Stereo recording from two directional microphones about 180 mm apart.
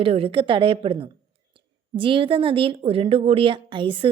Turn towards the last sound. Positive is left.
turn(degrees=-30)  # may be behind; listen again after turning